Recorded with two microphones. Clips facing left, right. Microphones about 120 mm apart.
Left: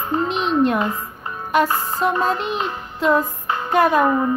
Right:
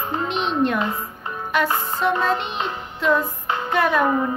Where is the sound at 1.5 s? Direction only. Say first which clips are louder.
Left 3 dB; 40° left (ahead or behind).